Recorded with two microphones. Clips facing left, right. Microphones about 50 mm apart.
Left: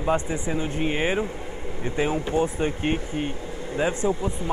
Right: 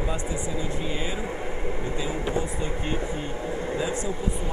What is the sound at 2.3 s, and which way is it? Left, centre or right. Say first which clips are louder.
Speech: left 5 dB; left.